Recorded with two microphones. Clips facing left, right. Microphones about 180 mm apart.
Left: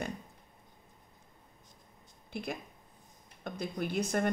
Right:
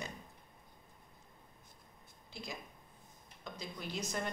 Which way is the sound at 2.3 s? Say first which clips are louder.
Left 8 dB; 60° left (ahead or behind).